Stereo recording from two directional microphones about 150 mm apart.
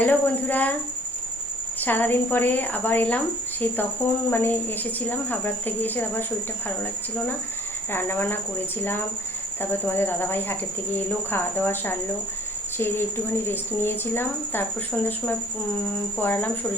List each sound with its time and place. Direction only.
0.0 s speech: 10° left (ahead or behind)
1.8 s speech: 10° left (ahead or behind)
7.9 s speech: 15° left (ahead or behind)
16.1 s speech: 10° left (ahead or behind)